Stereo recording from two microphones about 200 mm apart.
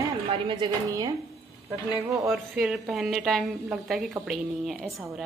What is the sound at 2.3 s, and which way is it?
A woman's voice, centre (ahead or behind).